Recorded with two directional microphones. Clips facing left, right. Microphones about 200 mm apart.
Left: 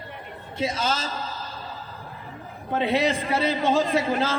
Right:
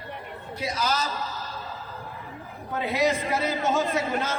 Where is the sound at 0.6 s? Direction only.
25° left (ahead or behind).